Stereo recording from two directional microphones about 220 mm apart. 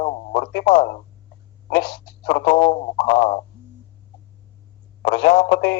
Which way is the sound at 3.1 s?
35° left (ahead or behind).